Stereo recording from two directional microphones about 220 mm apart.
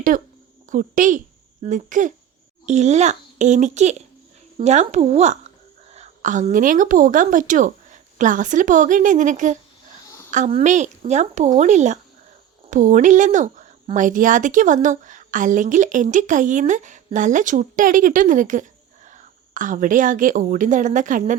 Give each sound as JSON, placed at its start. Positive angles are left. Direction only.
{"t": 0.1, "sound": "a woman's voice", "side_deg": -40}